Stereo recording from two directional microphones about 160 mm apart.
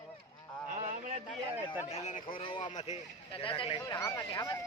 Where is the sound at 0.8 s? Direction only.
55° right (ahead or behind).